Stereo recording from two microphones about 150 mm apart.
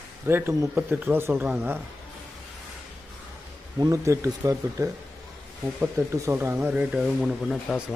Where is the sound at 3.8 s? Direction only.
20° right (ahead or behind).